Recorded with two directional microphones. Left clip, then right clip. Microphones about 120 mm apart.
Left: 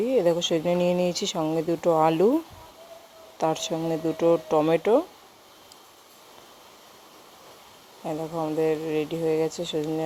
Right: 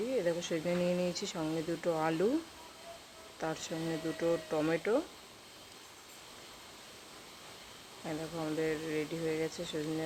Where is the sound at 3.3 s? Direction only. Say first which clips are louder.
Left 12 dB; 55° left (ahead or behind).